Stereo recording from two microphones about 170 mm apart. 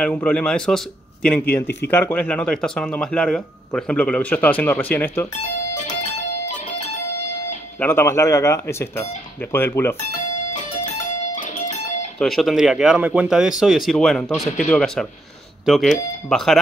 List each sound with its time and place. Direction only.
0.0 s speech: 5° left (ahead or behind)
7.8 s speech: 15° left (ahead or behind)
11.0 s music: 50° left (ahead or behind)
12.2 s speech: centre (ahead or behind)